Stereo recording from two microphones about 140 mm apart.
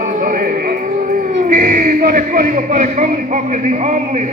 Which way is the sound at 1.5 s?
75° right (ahead or behind).